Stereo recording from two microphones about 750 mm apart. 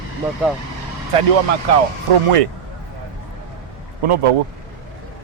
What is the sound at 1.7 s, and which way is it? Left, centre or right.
Speech, right.